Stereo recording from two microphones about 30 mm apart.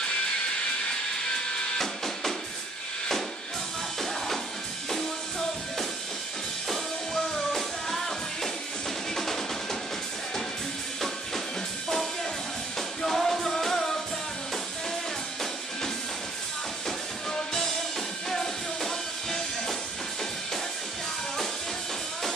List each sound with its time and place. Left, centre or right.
0.8 s music: centre
4.9 s music: centre
7.3 s music: centre
9.1 s music: centre
13.0 s music: centre
18.3 s music: centre